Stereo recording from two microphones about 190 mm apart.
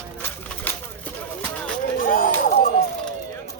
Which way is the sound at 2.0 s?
50° left (ahead or behind).